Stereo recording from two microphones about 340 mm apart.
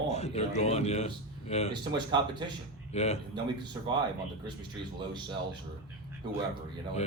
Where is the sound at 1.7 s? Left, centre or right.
Centre.